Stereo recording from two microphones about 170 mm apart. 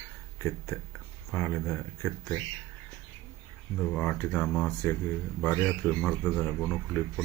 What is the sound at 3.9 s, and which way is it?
Speech, 10° left (ahead or behind).